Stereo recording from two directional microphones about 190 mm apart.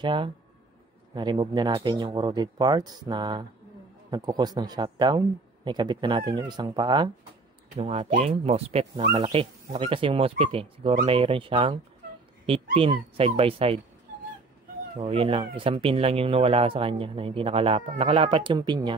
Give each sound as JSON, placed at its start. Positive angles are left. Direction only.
{"t": 0.0, "sound": "speech", "side_deg": -25}
{"t": 15.0, "sound": "speech", "side_deg": -30}